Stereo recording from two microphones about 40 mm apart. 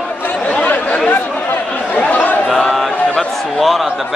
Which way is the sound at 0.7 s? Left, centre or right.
Left.